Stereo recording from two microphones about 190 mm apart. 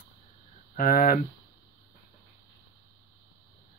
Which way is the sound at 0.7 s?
50° left (ahead or behind).